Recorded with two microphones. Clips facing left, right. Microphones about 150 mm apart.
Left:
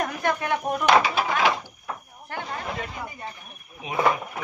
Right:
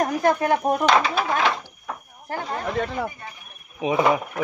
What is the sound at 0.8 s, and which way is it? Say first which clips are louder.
Speech: left 2 dB; 10° left (ahead or behind).